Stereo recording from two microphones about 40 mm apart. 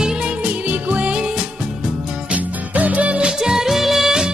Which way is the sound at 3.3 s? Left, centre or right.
Centre.